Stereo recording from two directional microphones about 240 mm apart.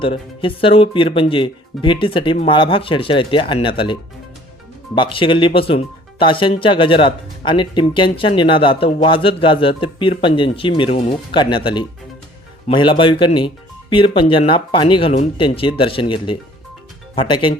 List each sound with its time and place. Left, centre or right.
0.0 s speech: left
4.9 s speech: left